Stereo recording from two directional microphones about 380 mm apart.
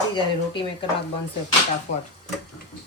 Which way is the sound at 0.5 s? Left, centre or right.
Centre.